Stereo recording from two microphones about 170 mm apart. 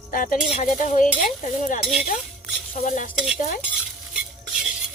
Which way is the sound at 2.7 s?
50° left (ahead or behind).